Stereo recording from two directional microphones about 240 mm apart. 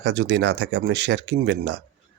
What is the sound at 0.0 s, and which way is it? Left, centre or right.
Speech, right.